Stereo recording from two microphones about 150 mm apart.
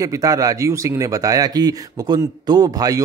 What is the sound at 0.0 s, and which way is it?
Speech, 20° right (ahead or behind).